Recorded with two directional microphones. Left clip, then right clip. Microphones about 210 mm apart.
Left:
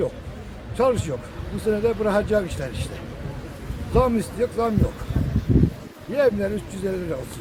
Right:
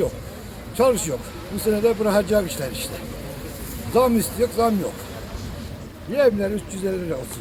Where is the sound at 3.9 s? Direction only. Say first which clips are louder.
Right 2 dB; centre (ahead or behind).